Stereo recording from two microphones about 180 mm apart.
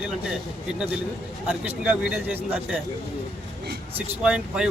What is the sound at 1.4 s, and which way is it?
Speech, 5° right (ahead or behind).